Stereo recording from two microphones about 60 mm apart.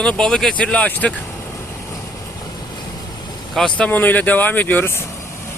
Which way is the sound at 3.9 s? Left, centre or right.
Left.